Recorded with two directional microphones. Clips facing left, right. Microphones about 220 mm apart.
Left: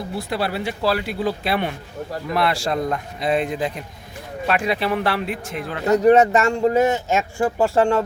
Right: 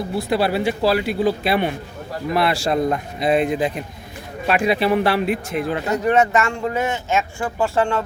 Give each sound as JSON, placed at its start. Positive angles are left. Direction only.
{"t": 0.2, "sound": "speech", "side_deg": -5}
{"t": 5.8, "sound": "speech", "side_deg": 40}